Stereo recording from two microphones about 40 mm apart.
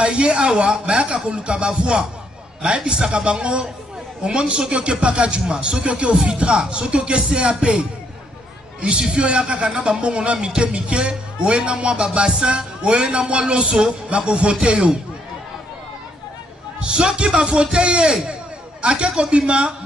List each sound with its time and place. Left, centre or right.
0.0 s speech: right
8.8 s speech: centre
14.0 s speech: right
16.8 s speech: right
18.3 s a sound: right
19.3 s speech: right